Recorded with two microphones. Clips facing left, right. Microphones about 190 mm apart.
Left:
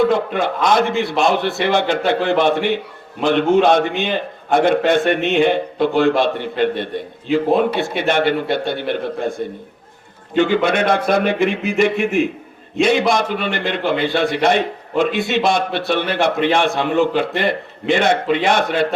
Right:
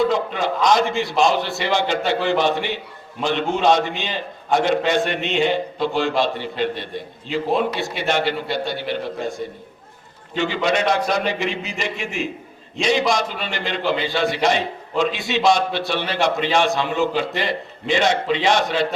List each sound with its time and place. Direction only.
0.0 s a man's voice: 55° left (ahead or behind)
10.3 s a man's voice: 55° left (ahead or behind)